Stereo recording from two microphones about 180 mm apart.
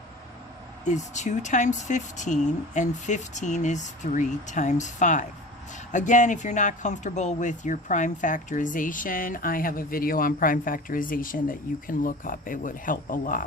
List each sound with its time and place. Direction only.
0.9 s speech: 40° left (ahead or behind)